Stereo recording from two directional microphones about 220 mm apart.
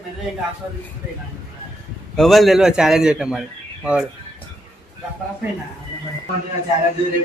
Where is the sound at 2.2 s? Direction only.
Centre (ahead or behind).